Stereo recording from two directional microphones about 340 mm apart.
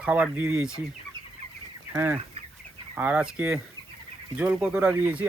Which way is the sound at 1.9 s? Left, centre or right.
Centre.